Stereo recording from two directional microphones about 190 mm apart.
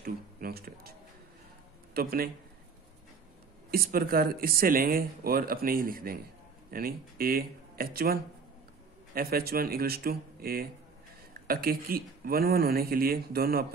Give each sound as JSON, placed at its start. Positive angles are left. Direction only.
{"t": 0.0, "sound": "a sound", "side_deg": -55}
{"t": 2.0, "sound": "speech", "side_deg": -50}
{"t": 3.7, "sound": "speech", "side_deg": -50}